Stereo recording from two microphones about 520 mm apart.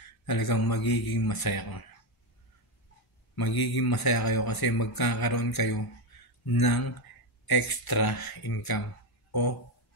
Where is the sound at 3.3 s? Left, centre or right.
Left.